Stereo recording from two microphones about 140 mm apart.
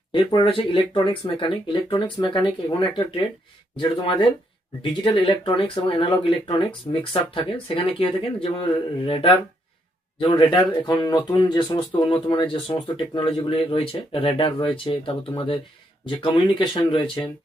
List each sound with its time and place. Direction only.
0.1 s speech: 35° left (ahead or behind)